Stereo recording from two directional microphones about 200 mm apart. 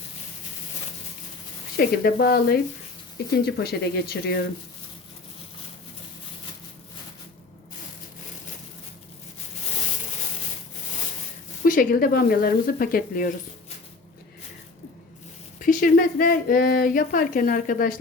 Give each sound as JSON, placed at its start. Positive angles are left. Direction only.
{"t": 1.7, "sound": "speech", "side_deg": 50}
{"t": 11.6, "sound": "speech", "side_deg": 45}
{"t": 15.6, "sound": "speech", "side_deg": 45}